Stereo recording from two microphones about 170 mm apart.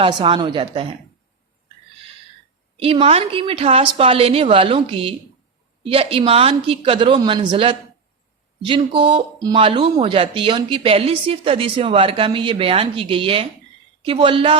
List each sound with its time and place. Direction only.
0.0 s a woman's voice: 30° right (ahead or behind)
2.7 s a woman's voice: 35° right (ahead or behind)